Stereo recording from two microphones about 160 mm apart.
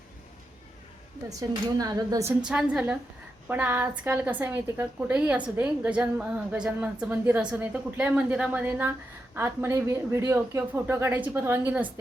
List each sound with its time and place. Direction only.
1.4 s speech: 20° right (ahead or behind)
2.4 s a woman's voice: 5° right (ahead or behind)